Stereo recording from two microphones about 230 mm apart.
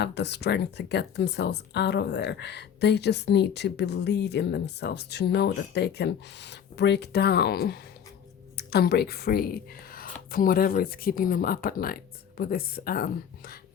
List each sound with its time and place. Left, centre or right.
0.0 s speech: left